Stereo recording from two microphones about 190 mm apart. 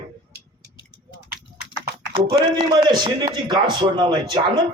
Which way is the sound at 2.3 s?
25° right (ahead or behind).